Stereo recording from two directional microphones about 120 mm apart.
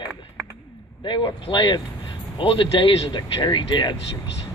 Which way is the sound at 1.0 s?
40° left (ahead or behind).